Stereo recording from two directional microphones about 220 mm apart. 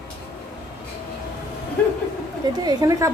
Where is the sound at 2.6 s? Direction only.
20° right (ahead or behind).